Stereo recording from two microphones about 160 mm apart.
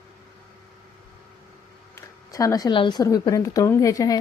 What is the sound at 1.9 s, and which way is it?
A woman's voice, 20° left (ahead or behind).